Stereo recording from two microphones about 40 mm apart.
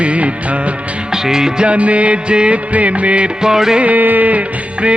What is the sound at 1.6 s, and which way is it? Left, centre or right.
Music, right.